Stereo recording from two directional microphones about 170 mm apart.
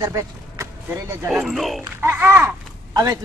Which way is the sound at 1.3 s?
Centre (ahead or behind).